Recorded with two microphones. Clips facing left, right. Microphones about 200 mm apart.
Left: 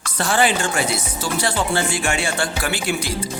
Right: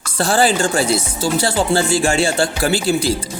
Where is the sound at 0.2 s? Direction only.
35° right (ahead or behind).